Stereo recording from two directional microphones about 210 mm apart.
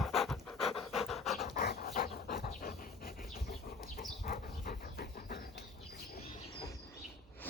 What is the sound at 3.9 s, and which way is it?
Bird, 40° left (ahead or behind).